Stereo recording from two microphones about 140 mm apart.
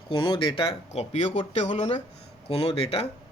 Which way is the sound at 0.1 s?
35° left (ahead or behind).